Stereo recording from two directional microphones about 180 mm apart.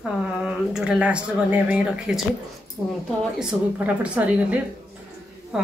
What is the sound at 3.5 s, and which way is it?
Speech, 5° right (ahead or behind).